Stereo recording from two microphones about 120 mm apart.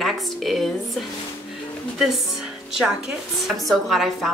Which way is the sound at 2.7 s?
5° right (ahead or behind).